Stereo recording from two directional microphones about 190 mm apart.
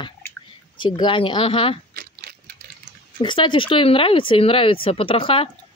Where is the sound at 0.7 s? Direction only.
25° left (ahead or behind).